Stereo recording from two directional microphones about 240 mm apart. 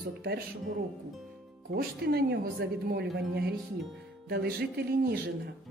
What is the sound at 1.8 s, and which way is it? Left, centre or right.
A woman's voice, right.